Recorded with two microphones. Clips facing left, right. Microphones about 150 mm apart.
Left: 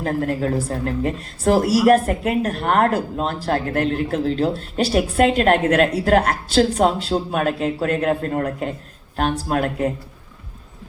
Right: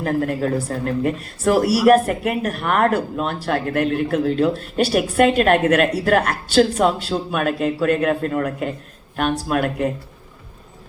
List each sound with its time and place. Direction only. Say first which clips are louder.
0.0 s speech: right 1 dB; 35° left (ahead or behind)